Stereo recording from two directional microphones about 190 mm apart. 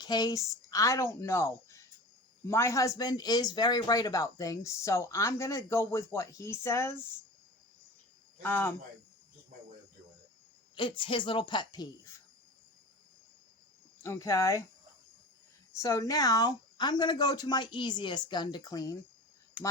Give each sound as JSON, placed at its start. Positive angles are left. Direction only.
{"t": 0.0, "sound": "speech", "side_deg": 20}
{"t": 8.4, "sound": "speech", "side_deg": 10}
{"t": 10.8, "sound": "speech", "side_deg": 25}
{"t": 14.0, "sound": "speech", "side_deg": 15}
{"t": 15.8, "sound": "speech", "side_deg": 20}